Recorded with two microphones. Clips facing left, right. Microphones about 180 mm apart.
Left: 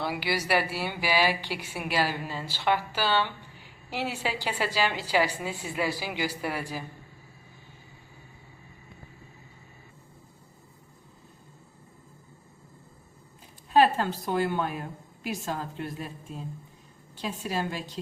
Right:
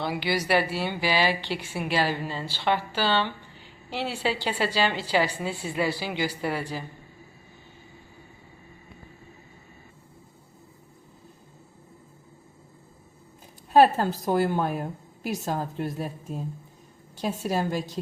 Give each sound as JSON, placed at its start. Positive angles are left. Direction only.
{"t": 0.0, "sound": "a woman's voice", "side_deg": 5}
{"t": 13.7, "sound": "a woman's voice", "side_deg": -40}